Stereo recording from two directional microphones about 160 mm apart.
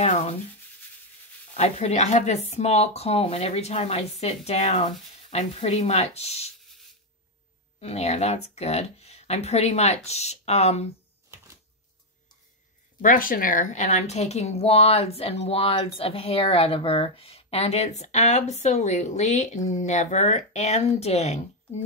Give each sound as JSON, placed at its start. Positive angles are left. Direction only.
{"t": 0.0, "sound": "speech", "side_deg": 40}
{"t": 1.6, "sound": "speech", "side_deg": 45}
{"t": 7.8, "sound": "speech", "side_deg": 45}
{"t": 13.0, "sound": "speech", "side_deg": 60}